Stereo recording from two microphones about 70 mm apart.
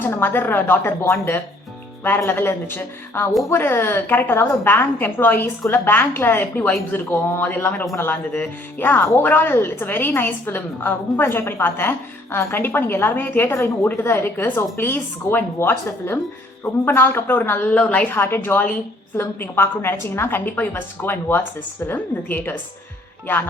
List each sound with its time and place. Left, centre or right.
0.0 s speech: left
1.0 s a woman's voice: left
16.9 s speech: left
18.1 s a woman's voice: left